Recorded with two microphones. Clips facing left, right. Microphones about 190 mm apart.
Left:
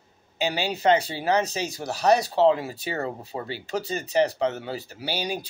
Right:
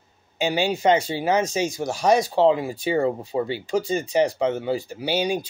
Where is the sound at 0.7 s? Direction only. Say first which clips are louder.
Even; 45° right (ahead or behind).